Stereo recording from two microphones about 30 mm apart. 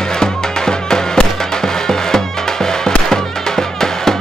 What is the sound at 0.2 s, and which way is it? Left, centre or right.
Music, centre.